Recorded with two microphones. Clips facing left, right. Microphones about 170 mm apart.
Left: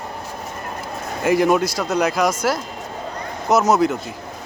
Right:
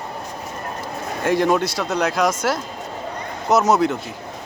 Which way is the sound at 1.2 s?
5° left (ahead or behind).